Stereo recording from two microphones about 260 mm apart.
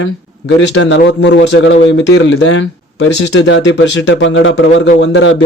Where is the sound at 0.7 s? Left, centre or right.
Left.